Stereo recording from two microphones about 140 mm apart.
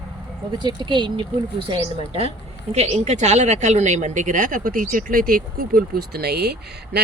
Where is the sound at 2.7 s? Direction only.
50° right (ahead or behind); by 6.2 s 90° right.